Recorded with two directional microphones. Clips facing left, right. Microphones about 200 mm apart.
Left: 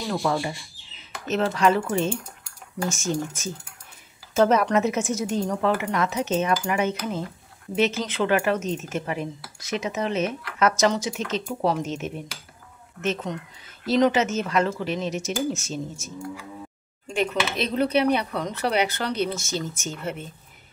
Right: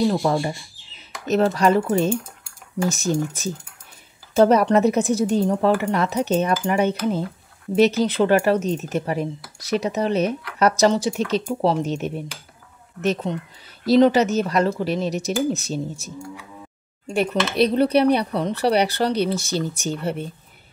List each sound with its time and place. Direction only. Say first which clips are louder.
0.0 s speech: right 5 dB; 30° right (ahead or behind)
4.3 s speech: right 4 dB; 35° right (ahead or behind)